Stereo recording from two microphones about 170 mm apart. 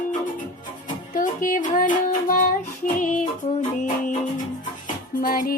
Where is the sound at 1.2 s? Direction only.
55° left (ahead or behind).